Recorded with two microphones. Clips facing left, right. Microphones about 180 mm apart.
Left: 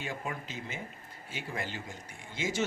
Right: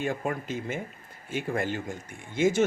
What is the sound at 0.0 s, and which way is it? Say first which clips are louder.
Speech: right 8 dB; 50° right (ahead or behind).